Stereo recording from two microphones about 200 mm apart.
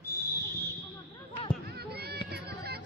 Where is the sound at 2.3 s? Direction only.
55° right (ahead or behind).